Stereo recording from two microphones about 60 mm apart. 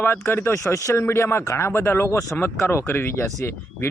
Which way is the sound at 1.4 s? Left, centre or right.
Left.